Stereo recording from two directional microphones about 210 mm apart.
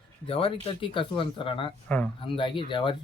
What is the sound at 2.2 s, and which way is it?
Speech, 25° left (ahead or behind).